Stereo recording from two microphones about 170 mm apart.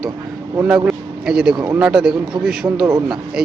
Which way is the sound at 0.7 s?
5° right (ahead or behind).